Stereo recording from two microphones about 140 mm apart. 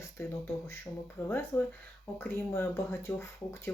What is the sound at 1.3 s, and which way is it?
Speech, 15° left (ahead or behind).